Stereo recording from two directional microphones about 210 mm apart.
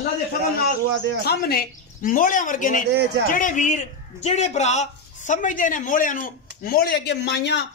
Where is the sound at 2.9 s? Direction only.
55° right (ahead or behind).